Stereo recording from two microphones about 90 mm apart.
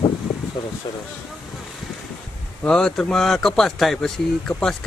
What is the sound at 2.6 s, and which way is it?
Speech, 5° left (ahead or behind).